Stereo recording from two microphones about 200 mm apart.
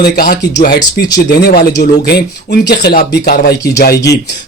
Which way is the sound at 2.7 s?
55° left (ahead or behind).